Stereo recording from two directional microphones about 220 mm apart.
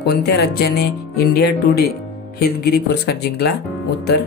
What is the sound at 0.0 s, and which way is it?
Speech, 45° left (ahead or behind).